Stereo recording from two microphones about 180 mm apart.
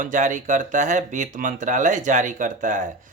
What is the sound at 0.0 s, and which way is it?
Speech, 45° right (ahead or behind).